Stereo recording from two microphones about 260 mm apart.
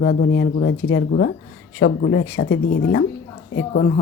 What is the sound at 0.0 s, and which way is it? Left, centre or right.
A woman's voice, left.